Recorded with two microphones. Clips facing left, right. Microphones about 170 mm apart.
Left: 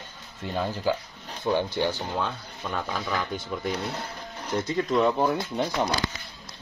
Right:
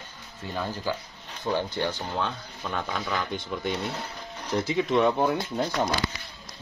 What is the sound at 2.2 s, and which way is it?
Speech, 5° left (ahead or behind).